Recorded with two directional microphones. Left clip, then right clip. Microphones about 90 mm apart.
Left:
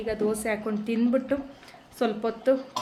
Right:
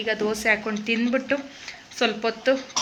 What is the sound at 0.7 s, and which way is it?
A woman's voice, 30° left (ahead or behind).